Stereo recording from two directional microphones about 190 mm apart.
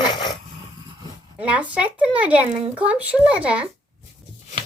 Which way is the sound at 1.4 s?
5° right (ahead or behind).